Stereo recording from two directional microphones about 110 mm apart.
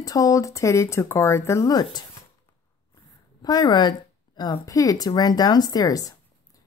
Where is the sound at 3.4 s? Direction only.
40° left (ahead or behind).